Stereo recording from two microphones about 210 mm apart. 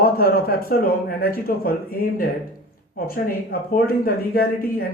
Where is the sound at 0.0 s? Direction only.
45° left (ahead or behind).